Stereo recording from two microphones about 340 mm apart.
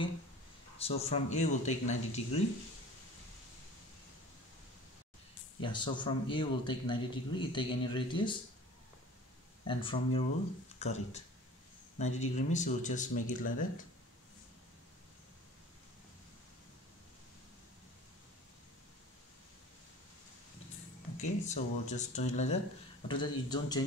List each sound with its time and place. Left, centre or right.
0.7 s speech: centre
5.6 s a man's voice: centre
9.7 s a man's voice: centre
21.2 s a man's voice: centre